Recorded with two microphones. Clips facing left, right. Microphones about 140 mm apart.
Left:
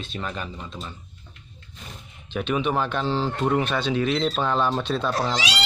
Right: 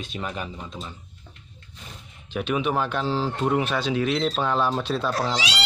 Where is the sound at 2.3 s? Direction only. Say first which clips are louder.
Even; 5° right (ahead or behind).